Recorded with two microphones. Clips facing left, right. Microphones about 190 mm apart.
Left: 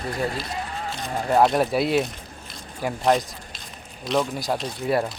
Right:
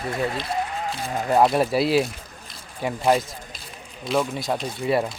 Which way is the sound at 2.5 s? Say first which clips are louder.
Even; centre (ahead or behind).